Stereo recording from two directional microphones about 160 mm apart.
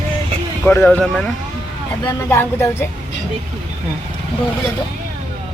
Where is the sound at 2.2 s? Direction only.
15° left (ahead or behind).